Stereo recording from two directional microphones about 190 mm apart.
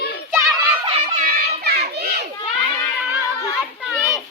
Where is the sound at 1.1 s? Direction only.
50° right (ahead or behind).